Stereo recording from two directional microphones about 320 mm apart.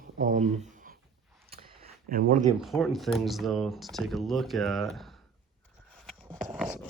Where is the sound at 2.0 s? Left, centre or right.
Right.